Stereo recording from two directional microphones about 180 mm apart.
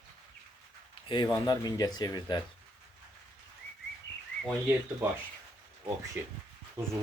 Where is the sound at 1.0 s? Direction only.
25° left (ahead or behind).